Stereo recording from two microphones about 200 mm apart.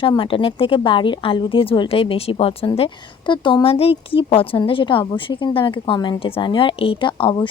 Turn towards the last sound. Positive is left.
turn(degrees=25)  # may be behind; listen again after turning